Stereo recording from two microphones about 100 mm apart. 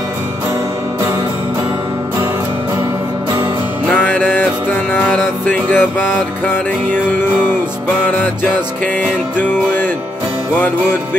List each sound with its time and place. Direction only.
3.9 s music: 20° left (ahead or behind)
9.4 s music: 20° left (ahead or behind)